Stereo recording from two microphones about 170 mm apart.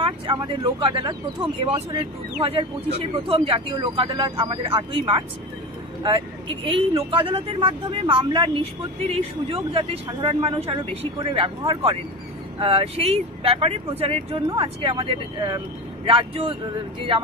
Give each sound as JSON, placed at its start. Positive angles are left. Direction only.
{"t": 0.0, "sound": "speech", "side_deg": -30}
{"t": 3.3, "sound": "speech", "side_deg": -30}